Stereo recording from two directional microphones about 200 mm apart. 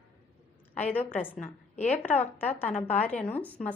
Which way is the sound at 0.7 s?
10° left (ahead or behind).